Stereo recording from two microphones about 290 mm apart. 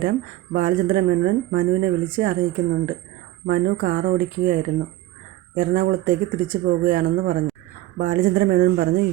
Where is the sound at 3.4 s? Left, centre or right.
Right.